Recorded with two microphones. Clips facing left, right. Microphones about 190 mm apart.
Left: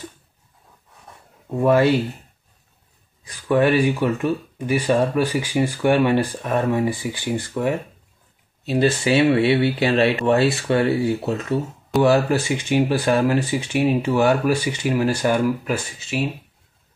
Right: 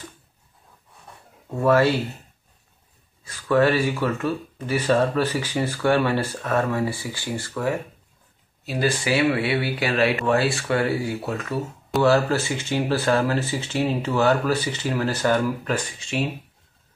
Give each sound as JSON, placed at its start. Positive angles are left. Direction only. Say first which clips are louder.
{"t": 1.5, "sound": "speech", "louder": "left 2 dB", "side_deg": 15}
{"t": 3.3, "sound": "speech", "louder": "left 1 dB", "side_deg": 15}